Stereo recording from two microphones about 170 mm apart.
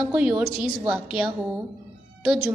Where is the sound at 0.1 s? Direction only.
5° right (ahead or behind).